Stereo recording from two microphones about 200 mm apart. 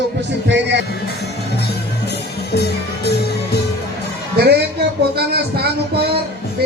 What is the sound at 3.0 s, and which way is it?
Music, 55° left (ahead or behind).